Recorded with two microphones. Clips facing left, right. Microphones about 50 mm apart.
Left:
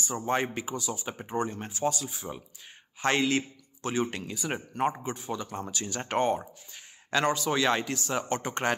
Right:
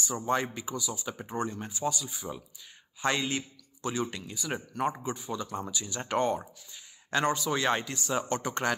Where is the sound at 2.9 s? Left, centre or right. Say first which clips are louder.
Left 4 dB; left.